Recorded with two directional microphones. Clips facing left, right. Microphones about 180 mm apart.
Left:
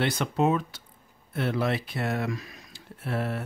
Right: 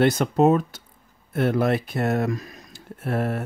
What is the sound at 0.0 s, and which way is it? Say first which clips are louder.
Speech: right 7 dB; 45° right (ahead or behind).